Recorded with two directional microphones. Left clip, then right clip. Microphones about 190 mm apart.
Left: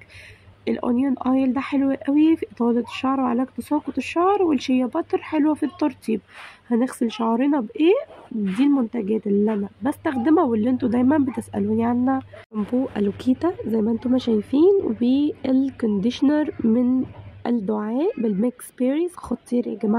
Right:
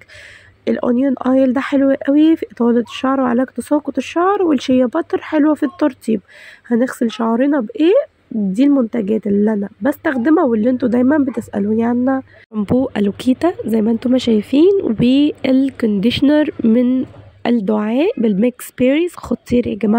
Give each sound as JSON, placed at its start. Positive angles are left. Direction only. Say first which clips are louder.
{"t": 0.7, "sound": "speech", "louder": "right 7 dB", "side_deg": -20}
{"t": 12.5, "sound": "speech", "louder": "right 7 dB", "side_deg": -40}